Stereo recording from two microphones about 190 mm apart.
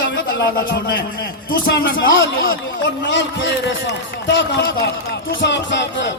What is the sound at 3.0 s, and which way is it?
A man's voice, 70° left (ahead or behind).